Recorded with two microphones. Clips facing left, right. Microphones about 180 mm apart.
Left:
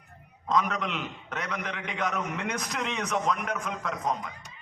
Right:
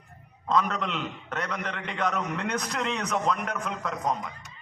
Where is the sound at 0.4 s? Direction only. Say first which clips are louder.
Right 1 dB; centre (ahead or behind).